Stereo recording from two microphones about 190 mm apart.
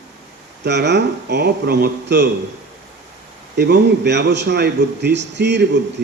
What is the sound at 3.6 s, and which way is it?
A man's voice, 60° right (ahead or behind).